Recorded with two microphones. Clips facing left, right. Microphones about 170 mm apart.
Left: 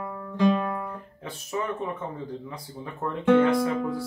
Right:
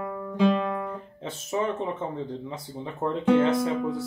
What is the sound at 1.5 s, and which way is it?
Speech, 30° right (ahead or behind).